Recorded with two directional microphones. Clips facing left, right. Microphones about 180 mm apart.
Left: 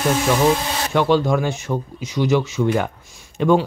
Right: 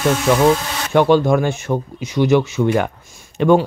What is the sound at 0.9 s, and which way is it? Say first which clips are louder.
Speech: right 4 dB; 55° right (ahead or behind).